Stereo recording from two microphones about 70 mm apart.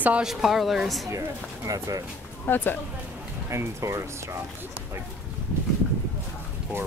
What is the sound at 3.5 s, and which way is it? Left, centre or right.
Speech, right.